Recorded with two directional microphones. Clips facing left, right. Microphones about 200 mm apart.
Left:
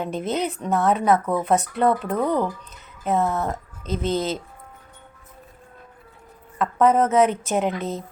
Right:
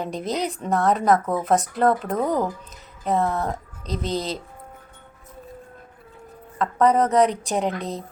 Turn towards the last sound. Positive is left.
turn(degrees=0)  # may be behind; listen again after turning